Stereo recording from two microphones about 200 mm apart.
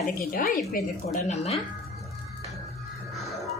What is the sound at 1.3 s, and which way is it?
Speech, 30° left (ahead or behind).